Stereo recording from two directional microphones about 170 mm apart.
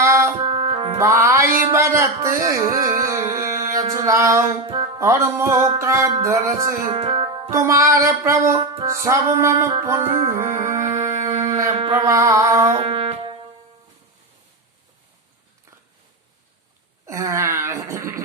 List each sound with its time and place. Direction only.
0.0 s music: 15° right (ahead or behind)
0.4 s music: 35° right (ahead or behind)
1.2 s music: 15° right (ahead or behind)
4.6 s speech: 30° right (ahead or behind)
4.9 s music: 15° right (ahead or behind)
6.9 s music: 30° right (ahead or behind)
7.5 s music: 20° right (ahead or behind)
11.0 s a sound: 20° right (ahead or behind)
12.7 s music: 35° right (ahead or behind)
17.1 s wail: 20° right (ahead or behind)